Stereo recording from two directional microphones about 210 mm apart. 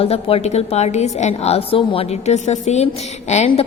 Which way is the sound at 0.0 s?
30° left (ahead or behind).